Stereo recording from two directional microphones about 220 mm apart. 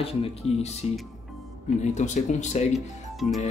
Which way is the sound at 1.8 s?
35° left (ahead or behind).